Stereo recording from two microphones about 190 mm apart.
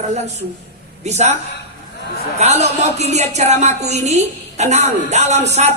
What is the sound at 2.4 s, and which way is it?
A woman's voice, 35° right (ahead or behind).